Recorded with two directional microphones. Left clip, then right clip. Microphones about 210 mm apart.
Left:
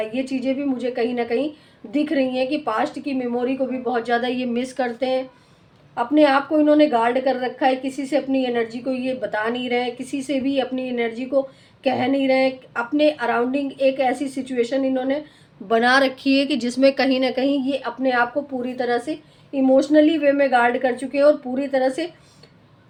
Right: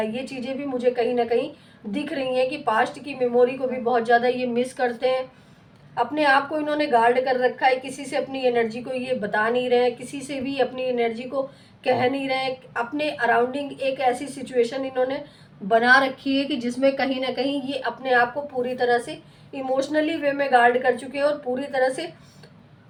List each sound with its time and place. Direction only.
0.1 s a woman's voice: 55° left (ahead or behind)